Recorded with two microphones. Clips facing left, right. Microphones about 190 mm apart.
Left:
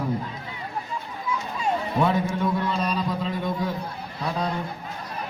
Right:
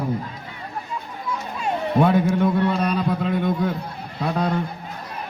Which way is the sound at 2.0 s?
55° right (ahead or behind).